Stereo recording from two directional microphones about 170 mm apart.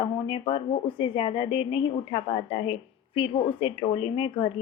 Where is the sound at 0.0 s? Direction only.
30° left (ahead or behind).